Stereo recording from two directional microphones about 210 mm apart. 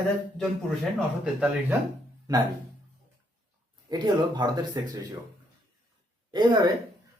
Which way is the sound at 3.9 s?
20° right (ahead or behind).